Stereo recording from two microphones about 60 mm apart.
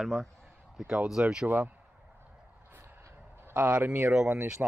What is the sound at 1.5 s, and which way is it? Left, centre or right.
Speech, right.